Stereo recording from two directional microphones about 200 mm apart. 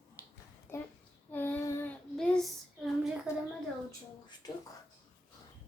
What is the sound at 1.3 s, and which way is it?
Child singing, 10° left (ahead or behind).